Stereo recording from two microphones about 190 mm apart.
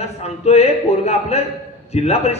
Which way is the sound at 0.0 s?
35° left (ahead or behind).